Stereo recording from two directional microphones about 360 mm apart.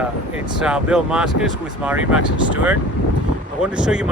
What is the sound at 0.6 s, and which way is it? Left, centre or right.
Speech, centre.